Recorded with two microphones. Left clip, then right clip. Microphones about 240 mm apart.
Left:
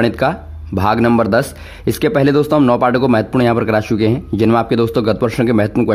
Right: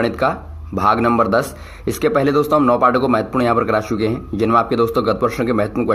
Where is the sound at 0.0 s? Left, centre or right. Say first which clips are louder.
Left 2 dB; left.